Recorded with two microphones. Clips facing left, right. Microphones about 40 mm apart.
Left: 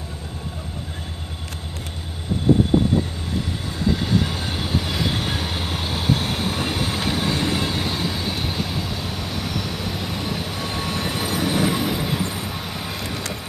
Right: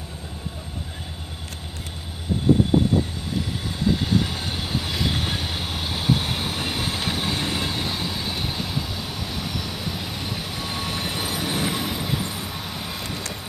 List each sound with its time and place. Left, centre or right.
4.0 s train: centre
6.9 s vehicle: centre
13.0 s vehicle: left